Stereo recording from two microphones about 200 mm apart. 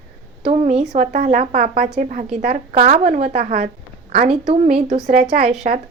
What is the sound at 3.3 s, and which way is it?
Speech, 45° right (ahead or behind).